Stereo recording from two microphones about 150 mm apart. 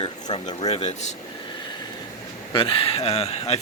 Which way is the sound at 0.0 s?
30° left (ahead or behind).